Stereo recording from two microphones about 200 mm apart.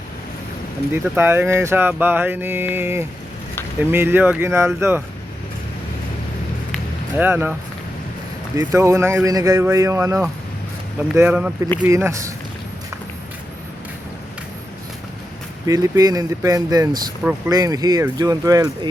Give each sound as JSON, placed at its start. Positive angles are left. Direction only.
{"t": 0.9, "sound": "speech", "side_deg": -10}
{"t": 7.2, "sound": "speech", "side_deg": -10}
{"t": 8.5, "sound": "speech", "side_deg": -15}
{"t": 15.6, "sound": "speech", "side_deg": -15}